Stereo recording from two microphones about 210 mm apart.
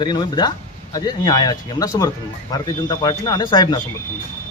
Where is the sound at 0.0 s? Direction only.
20° left (ahead or behind).